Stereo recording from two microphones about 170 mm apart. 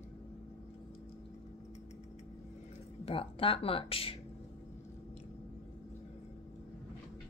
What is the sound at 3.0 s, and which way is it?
Speech, 30° left (ahead or behind).